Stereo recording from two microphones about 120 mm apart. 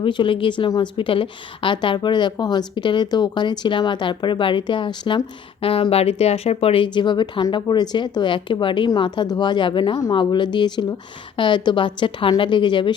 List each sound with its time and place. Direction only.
0.0 s a woman's voice: 45° left (ahead or behind)